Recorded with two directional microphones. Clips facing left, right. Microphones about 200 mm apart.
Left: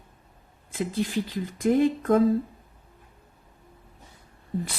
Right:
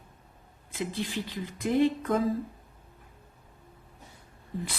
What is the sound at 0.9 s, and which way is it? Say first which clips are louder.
A woman's voice: left 6 dB; 45° left (ahead or behind).